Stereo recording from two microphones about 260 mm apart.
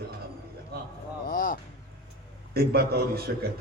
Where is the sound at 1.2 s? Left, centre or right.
Left.